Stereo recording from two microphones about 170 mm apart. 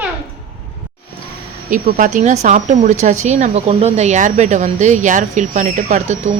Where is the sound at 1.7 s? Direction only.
50° right (ahead or behind).